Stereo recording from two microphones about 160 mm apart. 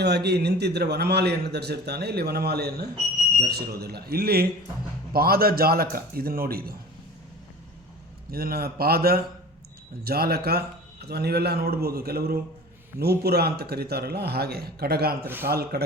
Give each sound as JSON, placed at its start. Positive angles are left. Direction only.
{"t": 0.0, "sound": "a man's voice", "side_deg": -90}
{"t": 8.3, "sound": "speech", "side_deg": -70}
{"t": 13.0, "sound": "speech", "side_deg": -90}